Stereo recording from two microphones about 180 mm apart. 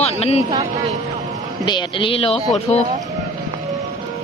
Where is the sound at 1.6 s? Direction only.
25° left (ahead or behind).